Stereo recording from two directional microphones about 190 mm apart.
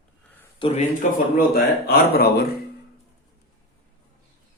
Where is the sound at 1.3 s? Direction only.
55° left (ahead or behind).